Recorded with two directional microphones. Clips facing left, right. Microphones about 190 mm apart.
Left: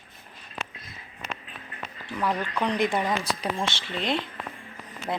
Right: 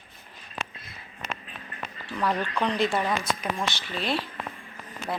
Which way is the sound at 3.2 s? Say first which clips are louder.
Even; 30° left (ahead or behind).